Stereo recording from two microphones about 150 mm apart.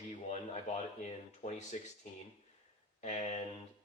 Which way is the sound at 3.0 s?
45° left (ahead or behind).